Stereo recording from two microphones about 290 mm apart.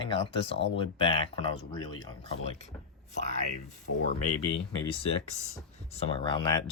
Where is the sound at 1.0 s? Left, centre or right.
Centre.